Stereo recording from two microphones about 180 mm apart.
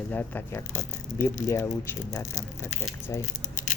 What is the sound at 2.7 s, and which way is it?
Speech, 40° left (ahead or behind).